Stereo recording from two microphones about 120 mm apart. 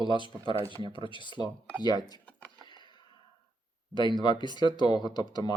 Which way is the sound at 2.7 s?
40° left (ahead or behind).